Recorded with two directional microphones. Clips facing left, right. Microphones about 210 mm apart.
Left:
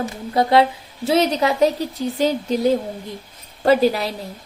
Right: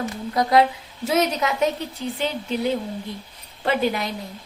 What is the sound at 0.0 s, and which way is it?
A woman's voice, 30° left (ahead or behind).